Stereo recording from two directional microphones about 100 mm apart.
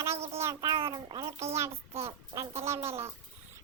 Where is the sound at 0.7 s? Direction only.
55° right (ahead or behind).